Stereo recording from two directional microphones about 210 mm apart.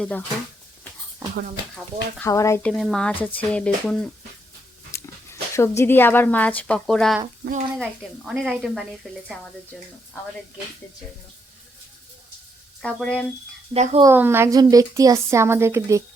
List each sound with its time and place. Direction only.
0.0 s speech: 5° left (ahead or behind)
1.7 s speech: 10° left (ahead or behind)
2.7 s speech: centre (ahead or behind)
4.9 s a sound: 15° left (ahead or behind)
6.6 s speech: 5° left (ahead or behind)
12.8 s speech: 5° left (ahead or behind)
13.7 s speech: 30° right (ahead or behind)
14.0 s a woman's voice: 10° right (ahead or behind)